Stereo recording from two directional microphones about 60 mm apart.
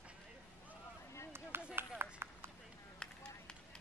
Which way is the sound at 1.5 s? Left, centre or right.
Right.